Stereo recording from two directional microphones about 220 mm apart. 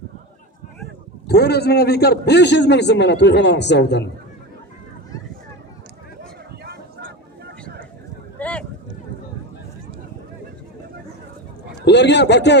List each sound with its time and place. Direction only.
1.3 s a man's voice: 50° left (ahead or behind)
8.4 s a sound: 5° left (ahead or behind)
11.9 s a man's voice: 50° left (ahead or behind)